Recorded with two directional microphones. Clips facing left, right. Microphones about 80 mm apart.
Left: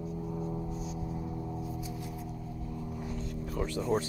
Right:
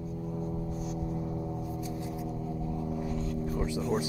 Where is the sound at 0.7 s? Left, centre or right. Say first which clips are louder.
Right 3 dB; right.